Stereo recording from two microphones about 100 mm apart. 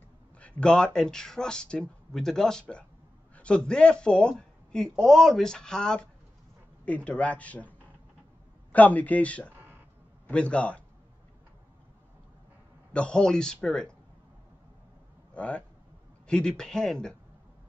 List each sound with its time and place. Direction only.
0.4 s speech: 10° left (ahead or behind)
8.7 s speech: 15° left (ahead or behind)
9.5 s a sound: 20° right (ahead or behind)
10.3 s speech: 10° left (ahead or behind)
12.9 s speech: 10° left (ahead or behind)
15.3 s speech: 10° left (ahead or behind)